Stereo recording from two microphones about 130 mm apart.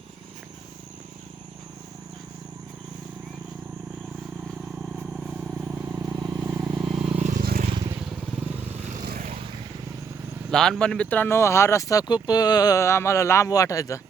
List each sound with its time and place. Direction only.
5.1 s vehicle: 5° right (ahead or behind)
6.0 s vehicle: 30° right (ahead or behind)
7.2 s vehicle: 80° right
8.9 s vehicle: 75° right (ahead or behind)
10.5 s speech: 5° left (ahead or behind); by 14.0 s 25° left (ahead or behind)